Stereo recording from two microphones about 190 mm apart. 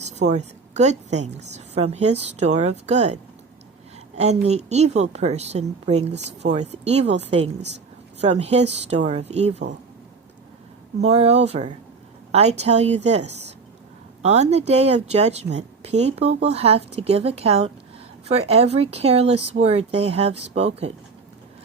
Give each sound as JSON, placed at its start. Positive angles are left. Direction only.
{"t": 0.0, "sound": "a woman's voice", "side_deg": -35}
{"t": 4.2, "sound": "a woman's voice", "side_deg": -35}
{"t": 6.1, "sound": "speech", "side_deg": -65}
{"t": 6.4, "sound": "a woman's voice", "side_deg": -35}
{"t": 11.0, "sound": "a woman's voice", "side_deg": -35}